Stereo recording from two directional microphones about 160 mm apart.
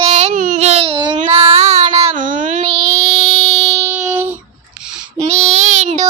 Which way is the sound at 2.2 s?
55° right (ahead or behind).